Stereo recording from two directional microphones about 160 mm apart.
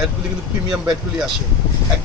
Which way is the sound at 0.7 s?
5° right (ahead or behind).